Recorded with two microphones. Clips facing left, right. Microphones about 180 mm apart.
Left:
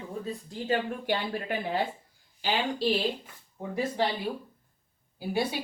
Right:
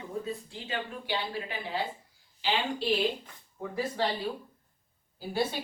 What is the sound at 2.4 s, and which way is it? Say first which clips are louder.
Speech: left 2 dB; 40° left (ahead or behind).